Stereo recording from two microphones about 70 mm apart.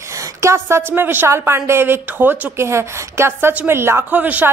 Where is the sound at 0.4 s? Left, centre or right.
Right.